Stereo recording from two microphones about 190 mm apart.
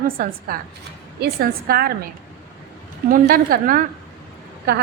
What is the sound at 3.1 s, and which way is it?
Speech, 50° right (ahead or behind).